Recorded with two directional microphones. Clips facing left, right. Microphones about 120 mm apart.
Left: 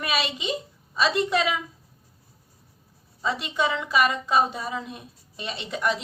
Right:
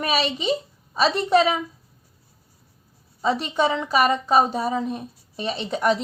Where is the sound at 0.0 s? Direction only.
35° right (ahead or behind).